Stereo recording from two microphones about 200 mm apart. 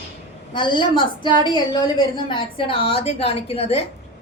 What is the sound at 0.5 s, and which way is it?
A woman's voice, 25° left (ahead or behind).